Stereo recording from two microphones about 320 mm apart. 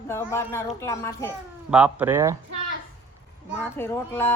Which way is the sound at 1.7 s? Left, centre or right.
Centre.